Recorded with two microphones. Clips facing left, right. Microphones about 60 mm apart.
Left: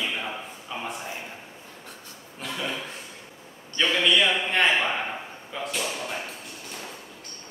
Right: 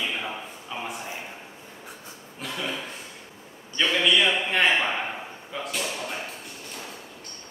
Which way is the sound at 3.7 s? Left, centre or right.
Centre.